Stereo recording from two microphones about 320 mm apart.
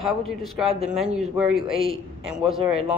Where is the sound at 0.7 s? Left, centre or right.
Centre.